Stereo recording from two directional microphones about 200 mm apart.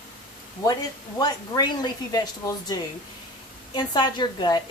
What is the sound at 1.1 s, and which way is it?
A woman's voice, 20° left (ahead or behind).